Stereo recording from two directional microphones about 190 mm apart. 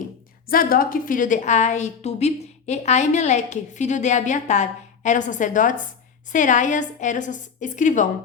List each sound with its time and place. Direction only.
0.4 s a woman's voice: 50° left (ahead or behind)